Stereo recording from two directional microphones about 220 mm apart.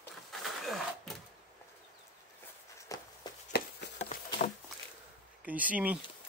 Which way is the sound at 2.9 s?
15° left (ahead or behind).